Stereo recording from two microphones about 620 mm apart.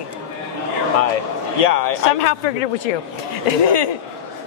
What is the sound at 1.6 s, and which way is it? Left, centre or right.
Speech, left.